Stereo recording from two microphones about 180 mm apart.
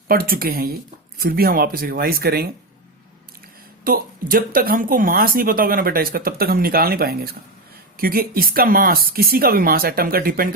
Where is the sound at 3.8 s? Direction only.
50° right (ahead or behind).